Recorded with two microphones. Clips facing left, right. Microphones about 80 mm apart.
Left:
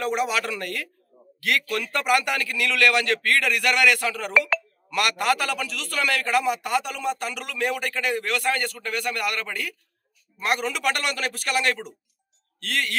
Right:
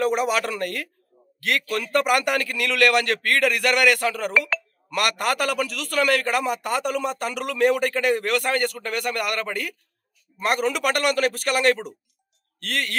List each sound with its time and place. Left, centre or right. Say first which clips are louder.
0.0 s a man's voice: right 3 dB; right